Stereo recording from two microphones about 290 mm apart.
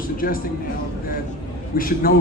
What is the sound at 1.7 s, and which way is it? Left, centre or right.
Speech, left.